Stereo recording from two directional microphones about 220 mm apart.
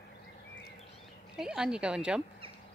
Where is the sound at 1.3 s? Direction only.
5° right (ahead or behind).